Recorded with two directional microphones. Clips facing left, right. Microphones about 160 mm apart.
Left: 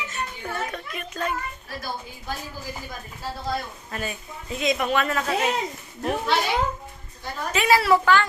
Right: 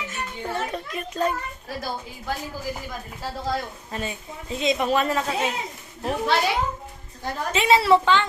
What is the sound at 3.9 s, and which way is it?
A woman's voice, 25° right (ahead or behind).